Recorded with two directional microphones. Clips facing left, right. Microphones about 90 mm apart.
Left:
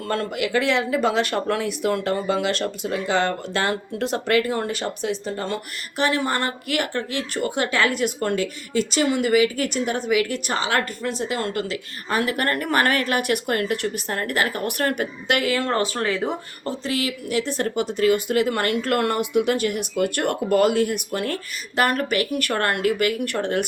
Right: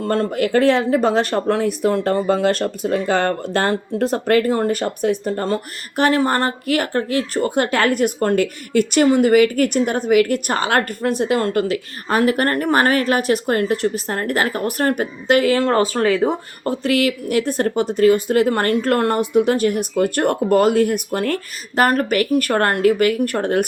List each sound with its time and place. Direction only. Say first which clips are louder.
0.0 s a woman's voice: right 6 dB; 35° right (ahead or behind)
2.2 s a woman's voice: right 5 dB; 45° right (ahead or behind)
16.2 s a woman's voice: right 7 dB; 50° right (ahead or behind)